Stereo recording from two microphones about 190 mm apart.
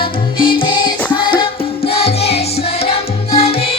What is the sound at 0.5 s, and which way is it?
Music, 25° left (ahead or behind).